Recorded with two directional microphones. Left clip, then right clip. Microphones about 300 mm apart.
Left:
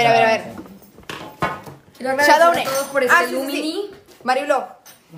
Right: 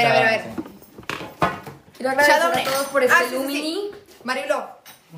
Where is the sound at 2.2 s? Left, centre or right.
Centre.